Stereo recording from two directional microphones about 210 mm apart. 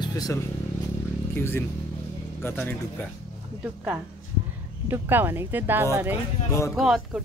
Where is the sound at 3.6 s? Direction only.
10° right (ahead or behind).